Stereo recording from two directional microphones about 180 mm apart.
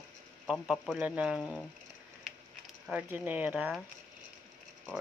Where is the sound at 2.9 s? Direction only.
10° right (ahead or behind).